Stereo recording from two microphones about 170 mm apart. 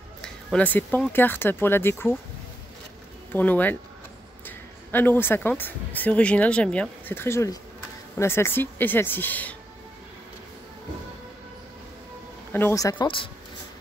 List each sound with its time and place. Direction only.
0.2 s a sound: 5° left (ahead or behind)
1.1 s speech: 10° left (ahead or behind)
3.3 s speech: 10° left (ahead or behind)
12.5 s speech: 15° left (ahead or behind)
13.0 s speech: 30° left (ahead or behind)